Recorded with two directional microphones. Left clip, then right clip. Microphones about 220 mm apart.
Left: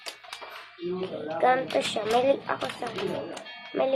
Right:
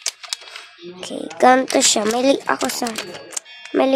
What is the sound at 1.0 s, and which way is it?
Speech, 60° right (ahead or behind).